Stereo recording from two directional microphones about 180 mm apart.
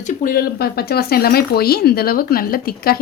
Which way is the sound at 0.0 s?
45° left (ahead or behind).